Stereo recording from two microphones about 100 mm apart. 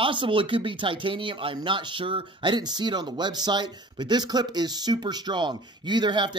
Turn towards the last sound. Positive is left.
turn(degrees=-50)  # may be behind; listen again after turning